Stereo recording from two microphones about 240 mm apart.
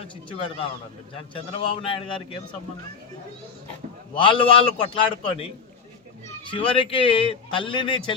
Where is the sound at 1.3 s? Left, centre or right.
Left.